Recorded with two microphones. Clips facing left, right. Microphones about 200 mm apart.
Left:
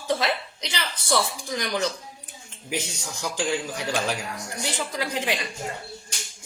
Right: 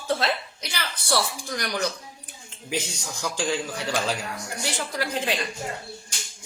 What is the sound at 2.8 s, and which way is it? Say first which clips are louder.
Speech: even; 15° left (ahead or behind).